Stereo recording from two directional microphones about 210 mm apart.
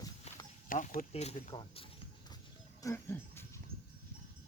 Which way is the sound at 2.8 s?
15° left (ahead or behind).